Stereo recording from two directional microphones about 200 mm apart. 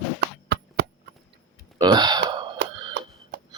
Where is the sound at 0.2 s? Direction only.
55° right (ahead or behind).